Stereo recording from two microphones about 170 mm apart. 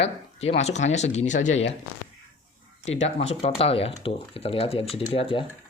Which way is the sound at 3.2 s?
35° left (ahead or behind).